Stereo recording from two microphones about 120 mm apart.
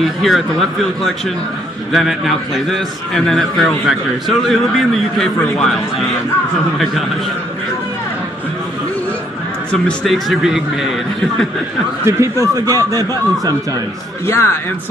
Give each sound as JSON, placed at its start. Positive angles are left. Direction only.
{"t": 0.0, "sound": "a man's voice", "side_deg": 0}
{"t": 9.7, "sound": "a man's voice", "side_deg": 5}
{"t": 12.0, "sound": "speech", "side_deg": -25}
{"t": 14.2, "sound": "speech", "side_deg": 20}